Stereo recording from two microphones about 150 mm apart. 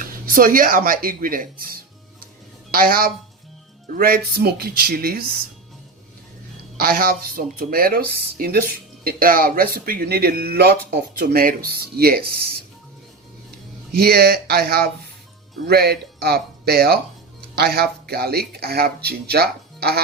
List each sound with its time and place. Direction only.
0.0 s speech: 70° right (ahead or behind)
4.4 s speech: 90° right
6.7 s speech: 90° right
11.2 s speech: 80° right
13.9 s speech: 90° right